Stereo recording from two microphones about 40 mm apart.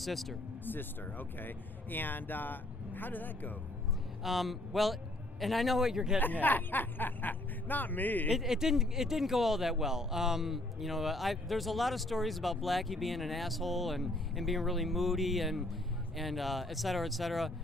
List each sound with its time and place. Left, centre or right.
0.0 s speech: centre
0.6 s speech: left
4.2 s speech: centre
6.1 s speech: left
8.3 s speech: centre